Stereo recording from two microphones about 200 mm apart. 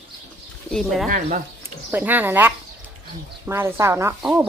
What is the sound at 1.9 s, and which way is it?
Speech, 10° right (ahead or behind).